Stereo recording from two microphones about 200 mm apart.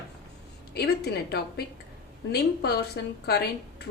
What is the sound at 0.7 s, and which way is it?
A woman's voice, 55° left (ahead or behind).